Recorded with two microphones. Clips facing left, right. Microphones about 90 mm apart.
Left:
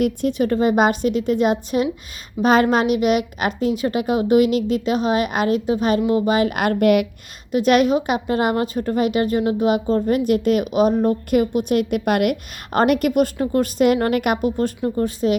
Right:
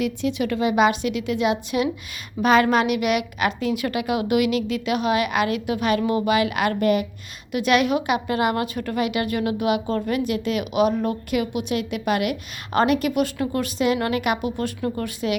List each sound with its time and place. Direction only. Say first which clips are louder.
0.0 s a woman's voice: left 4 dB; 45° left (ahead or behind); by 7.1 s 65° left (ahead or behind)
7.5 s a woman's voice: left 4 dB; 40° left (ahead or behind)
14.8 s speech: left 5 dB; 25° left (ahead or behind)